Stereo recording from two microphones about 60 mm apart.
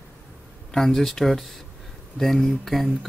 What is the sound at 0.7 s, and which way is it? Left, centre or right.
Speech, centre.